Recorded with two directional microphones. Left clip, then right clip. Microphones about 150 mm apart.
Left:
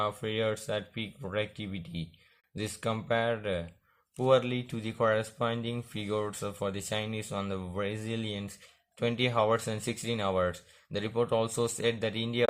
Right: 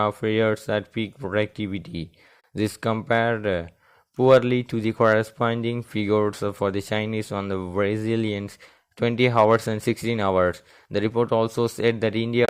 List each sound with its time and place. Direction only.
0.0 s speech: 40° right (ahead or behind)